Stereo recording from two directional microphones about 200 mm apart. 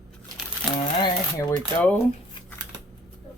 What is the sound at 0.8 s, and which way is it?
Typewriter, 20° left (ahead or behind).